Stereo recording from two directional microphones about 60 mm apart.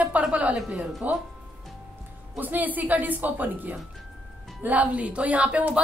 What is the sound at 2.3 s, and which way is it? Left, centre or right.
A woman's voice, right.